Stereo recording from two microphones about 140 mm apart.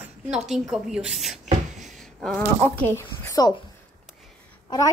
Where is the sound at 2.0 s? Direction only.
5° left (ahead or behind).